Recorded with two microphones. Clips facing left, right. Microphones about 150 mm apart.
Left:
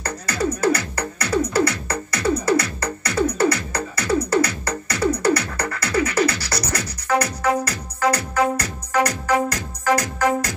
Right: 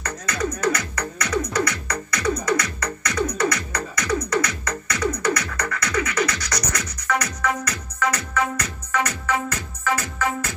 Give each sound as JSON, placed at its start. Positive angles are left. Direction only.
{"t": 0.0, "sound": "music", "side_deg": 35}